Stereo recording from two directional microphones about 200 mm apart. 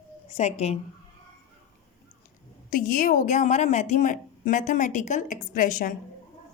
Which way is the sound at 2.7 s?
45° left (ahead or behind).